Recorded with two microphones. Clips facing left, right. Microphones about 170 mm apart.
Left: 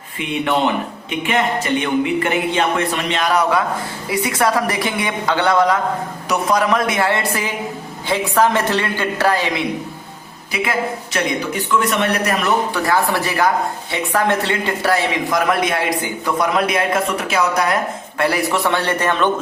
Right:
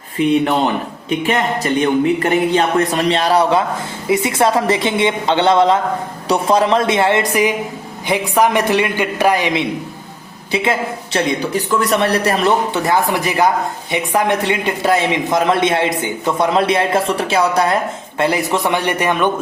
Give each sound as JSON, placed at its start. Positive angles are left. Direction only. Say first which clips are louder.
{"t": 0.2, "sound": "a man's voice", "louder": "right 5 dB", "side_deg": -35}